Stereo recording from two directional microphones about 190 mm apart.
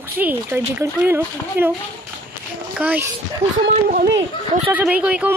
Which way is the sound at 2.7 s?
10° right (ahead or behind).